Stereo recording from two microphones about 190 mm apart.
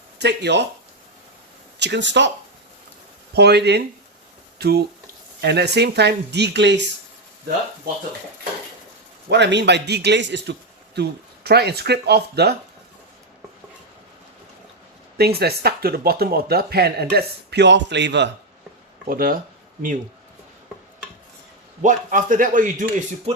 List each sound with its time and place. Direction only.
0.2 s speech: 60° right (ahead or behind)
1.8 s speech: 65° right (ahead or behind)
3.3 s speech: 60° right (ahead or behind)
9.3 s speech: 65° right (ahead or behind)
15.2 s speech: 55° right (ahead or behind)
19.0 s a man's voice: 50° right (ahead or behind)
21.8 s a man's voice: 40° right (ahead or behind)